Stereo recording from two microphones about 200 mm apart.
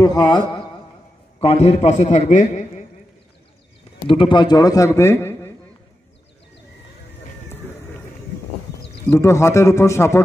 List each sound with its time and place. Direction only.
0.0 s a sound: 20° left (ahead or behind)
1.4 s a man's voice: 30° left (ahead or behind)
4.1 s a man's voice: 25° left (ahead or behind)
9.1 s a man's voice: 15° left (ahead or behind)